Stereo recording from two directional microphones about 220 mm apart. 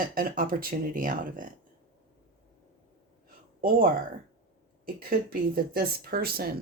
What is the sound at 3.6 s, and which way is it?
Speech, 40° right (ahead or behind).